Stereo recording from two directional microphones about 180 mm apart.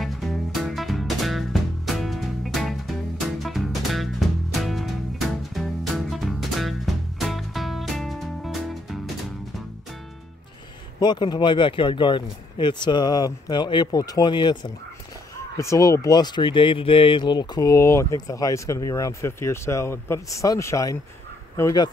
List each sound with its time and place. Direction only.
0.0 s music: centre (ahead or behind)
11.0 s speech: 25° left (ahead or behind)